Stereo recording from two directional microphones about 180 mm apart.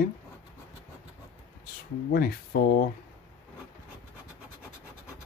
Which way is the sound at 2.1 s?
55° left (ahead or behind).